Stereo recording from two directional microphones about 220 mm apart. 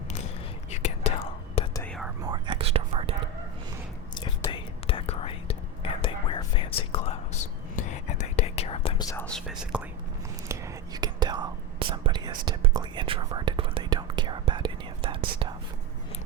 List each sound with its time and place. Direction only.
0.7 s whispering: 30° left (ahead or behind)
1.7 s whispering: 10° left (ahead or behind)
2.2 s whispering: 20° right (ahead or behind)
4.1 s whispering: 20° left (ahead or behind)
9.2 s whispering: centre (ahead or behind)
10.5 s whispering: 20° right (ahead or behind)